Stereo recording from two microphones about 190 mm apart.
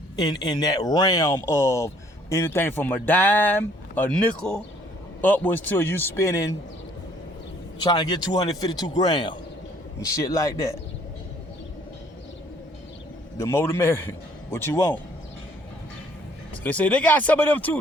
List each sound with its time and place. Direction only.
0.2 s speech: 20° left (ahead or behind)
7.9 s speech: 20° left (ahead or behind)
13.3 s speech: 15° left (ahead or behind)
16.6 s speech: 5° left (ahead or behind)